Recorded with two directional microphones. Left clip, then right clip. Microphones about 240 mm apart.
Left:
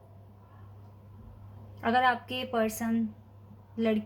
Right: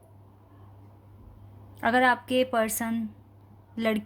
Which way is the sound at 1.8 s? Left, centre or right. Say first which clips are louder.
Right 3 dB; right.